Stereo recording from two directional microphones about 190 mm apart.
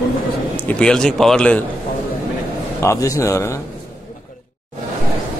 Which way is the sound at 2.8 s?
15° left (ahead or behind).